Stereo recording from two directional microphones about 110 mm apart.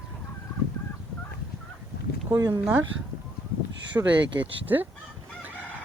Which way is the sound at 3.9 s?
15° right (ahead or behind).